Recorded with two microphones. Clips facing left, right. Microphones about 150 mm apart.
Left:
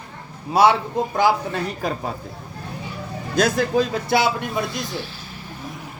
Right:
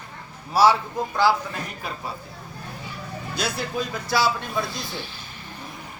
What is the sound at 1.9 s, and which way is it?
Speech, 50° left (ahead or behind).